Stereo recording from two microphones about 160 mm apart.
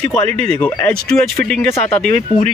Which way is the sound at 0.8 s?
5° left (ahead or behind).